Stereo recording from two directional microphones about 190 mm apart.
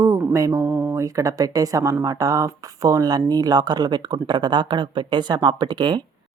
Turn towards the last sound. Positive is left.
turn(degrees=-25)  # may be behind; listen again after turning